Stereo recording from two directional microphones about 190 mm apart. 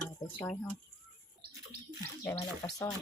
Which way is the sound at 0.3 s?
10° left (ahead or behind).